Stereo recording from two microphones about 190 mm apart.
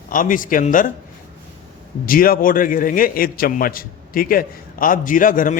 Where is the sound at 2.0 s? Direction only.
50° left (ahead or behind).